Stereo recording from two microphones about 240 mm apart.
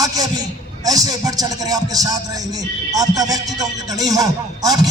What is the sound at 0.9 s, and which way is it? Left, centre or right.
Speech, centre.